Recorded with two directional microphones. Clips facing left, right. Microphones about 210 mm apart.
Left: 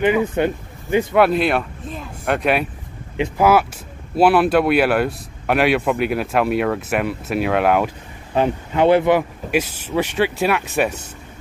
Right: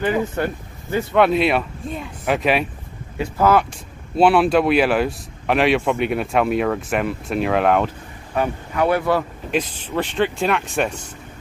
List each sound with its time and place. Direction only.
0.0 s a man's voice: 20° left (ahead or behind)
1.1 s speech: centre (ahead or behind)
3.2 s speech: 10° left (ahead or behind)
8.4 s speech: 25° left (ahead or behind)
9.5 s speech: 10° left (ahead or behind)